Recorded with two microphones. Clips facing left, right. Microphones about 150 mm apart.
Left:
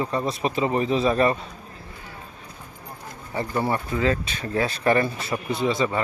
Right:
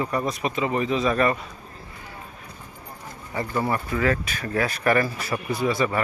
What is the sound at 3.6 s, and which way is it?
Speech, 25° left (ahead or behind).